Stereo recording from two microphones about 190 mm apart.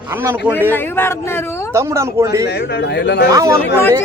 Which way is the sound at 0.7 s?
10° left (ahead or behind).